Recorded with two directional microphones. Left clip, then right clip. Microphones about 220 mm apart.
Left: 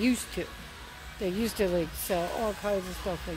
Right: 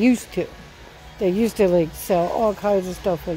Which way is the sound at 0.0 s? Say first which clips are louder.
Right 9 dB; 30° right (ahead or behind).